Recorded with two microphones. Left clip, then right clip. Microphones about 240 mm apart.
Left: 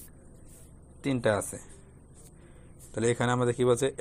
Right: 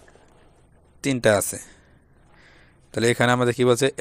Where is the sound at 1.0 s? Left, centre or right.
Right.